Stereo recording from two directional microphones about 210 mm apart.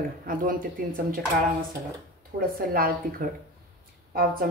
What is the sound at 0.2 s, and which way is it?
Speech, 40° right (ahead or behind).